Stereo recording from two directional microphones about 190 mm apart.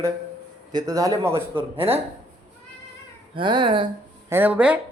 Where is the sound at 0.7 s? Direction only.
20° right (ahead or behind).